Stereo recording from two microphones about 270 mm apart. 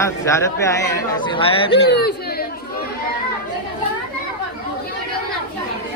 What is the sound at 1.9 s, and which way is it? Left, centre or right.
Speech, left.